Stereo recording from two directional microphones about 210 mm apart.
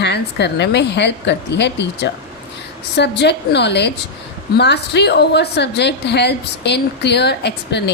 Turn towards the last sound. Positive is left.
turn(degrees=55)  # may be behind; listen again after turning